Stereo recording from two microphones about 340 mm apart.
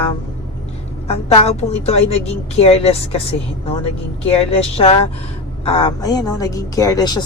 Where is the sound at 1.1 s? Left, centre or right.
Centre.